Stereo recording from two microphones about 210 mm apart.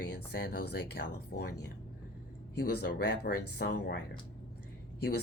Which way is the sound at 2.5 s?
50° left (ahead or behind).